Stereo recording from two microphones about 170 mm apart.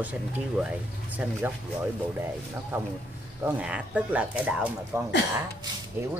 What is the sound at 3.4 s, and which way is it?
Speech, 5° right (ahead or behind).